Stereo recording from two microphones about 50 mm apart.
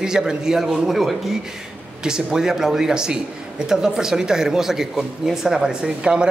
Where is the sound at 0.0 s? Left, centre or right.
Centre.